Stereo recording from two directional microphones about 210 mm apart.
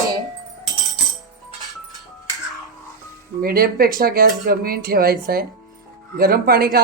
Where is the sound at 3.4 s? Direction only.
45° right (ahead or behind).